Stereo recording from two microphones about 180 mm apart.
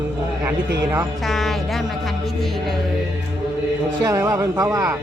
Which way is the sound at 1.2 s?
Centre (ahead or behind).